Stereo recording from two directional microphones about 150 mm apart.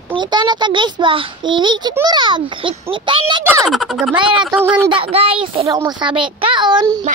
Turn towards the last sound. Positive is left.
turn(degrees=-30)  # may be behind; listen again after turning